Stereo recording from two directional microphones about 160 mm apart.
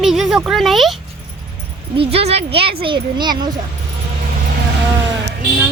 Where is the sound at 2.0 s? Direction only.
40° right (ahead or behind).